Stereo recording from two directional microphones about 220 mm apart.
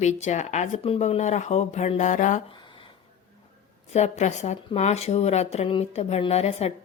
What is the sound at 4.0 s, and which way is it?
A woman's voice, 30° left (ahead or behind).